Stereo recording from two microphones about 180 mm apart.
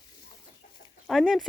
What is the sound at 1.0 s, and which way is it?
Speech, centre (ahead or behind).